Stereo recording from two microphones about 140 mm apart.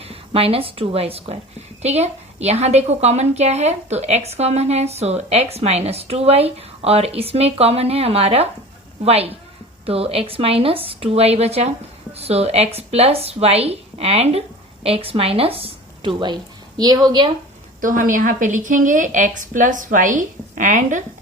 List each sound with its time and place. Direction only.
0.0 s a woman's voice: 45° right (ahead or behind)
17.7 s a woman's voice: 70° right (ahead or behind)